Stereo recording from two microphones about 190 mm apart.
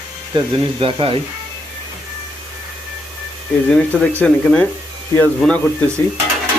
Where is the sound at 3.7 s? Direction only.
5° left (ahead or behind).